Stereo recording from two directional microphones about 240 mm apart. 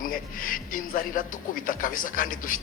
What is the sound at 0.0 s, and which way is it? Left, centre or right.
Speech, left.